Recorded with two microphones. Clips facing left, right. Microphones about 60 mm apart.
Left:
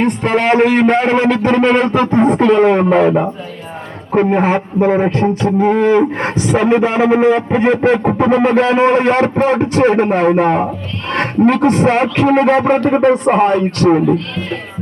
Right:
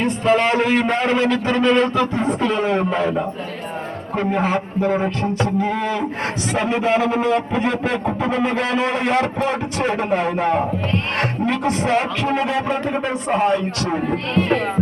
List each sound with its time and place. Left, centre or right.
0.0 s a man's voice: left
4.1 s a sound: left
11.1 s a man's voice: left
14.1 s speech: right